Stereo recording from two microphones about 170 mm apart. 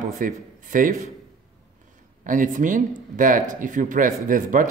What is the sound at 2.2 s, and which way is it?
Speech, 50° right (ahead or behind).